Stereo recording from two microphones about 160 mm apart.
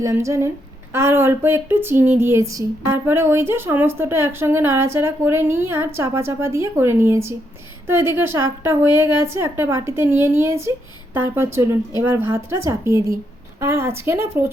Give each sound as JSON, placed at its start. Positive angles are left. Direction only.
{"t": 0.0, "sound": "speech", "side_deg": -20}